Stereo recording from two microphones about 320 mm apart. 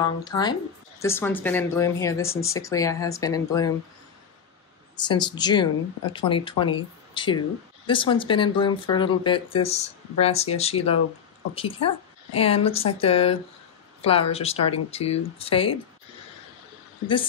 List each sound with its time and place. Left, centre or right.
0.0 s speech: centre
4.9 s speech: centre